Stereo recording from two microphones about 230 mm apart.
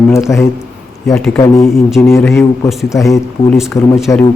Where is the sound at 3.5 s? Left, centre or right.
Centre.